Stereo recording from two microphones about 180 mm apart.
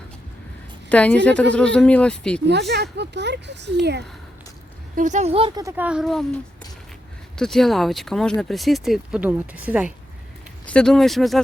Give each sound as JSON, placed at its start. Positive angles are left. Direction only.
{"t": 0.9, "sound": "a woman's voice", "side_deg": 5}
{"t": 2.5, "sound": "speech", "side_deg": -70}
{"t": 4.9, "sound": "speech", "side_deg": -40}
{"t": 5.7, "sound": "speech", "side_deg": -5}
{"t": 7.3, "sound": "speech", "side_deg": 5}
{"t": 10.7, "sound": "speech", "side_deg": 5}